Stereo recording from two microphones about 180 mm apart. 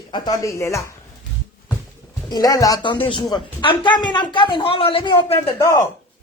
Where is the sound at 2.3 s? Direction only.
20° left (ahead or behind).